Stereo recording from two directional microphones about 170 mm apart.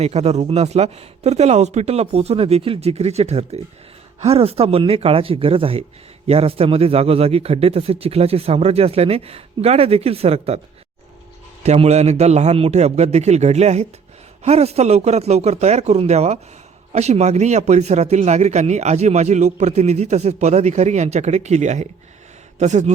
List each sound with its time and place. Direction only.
0.0 s a man's voice: 40° right (ahead or behind)
11.6 s a man's voice: 40° right (ahead or behind)